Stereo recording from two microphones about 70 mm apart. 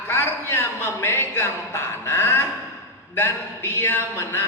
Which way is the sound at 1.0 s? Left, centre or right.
Left.